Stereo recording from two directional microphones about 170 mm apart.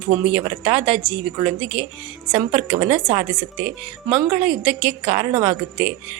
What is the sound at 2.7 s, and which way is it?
Speech, 35° right (ahead or behind).